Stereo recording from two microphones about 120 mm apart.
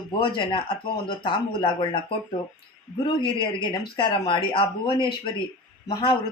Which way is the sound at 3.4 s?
40° left (ahead or behind).